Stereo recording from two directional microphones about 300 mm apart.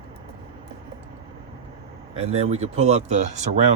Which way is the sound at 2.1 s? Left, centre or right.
Right.